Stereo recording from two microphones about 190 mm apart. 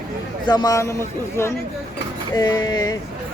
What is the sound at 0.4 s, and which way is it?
Speech, 20° left (ahead or behind).